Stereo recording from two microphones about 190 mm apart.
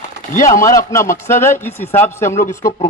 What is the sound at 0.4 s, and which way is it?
A man's voice, 15° left (ahead or behind).